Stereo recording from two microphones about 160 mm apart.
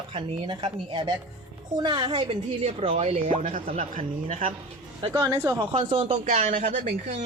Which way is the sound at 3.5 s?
55° right (ahead or behind).